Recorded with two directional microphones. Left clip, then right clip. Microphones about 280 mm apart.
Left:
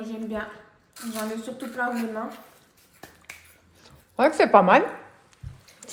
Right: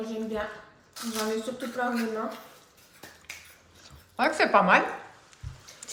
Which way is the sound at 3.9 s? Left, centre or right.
Left.